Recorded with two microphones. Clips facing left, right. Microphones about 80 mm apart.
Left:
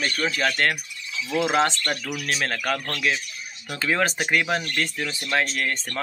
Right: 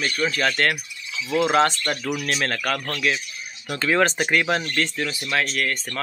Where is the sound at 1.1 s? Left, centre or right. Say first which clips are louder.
Right 3 dB; right.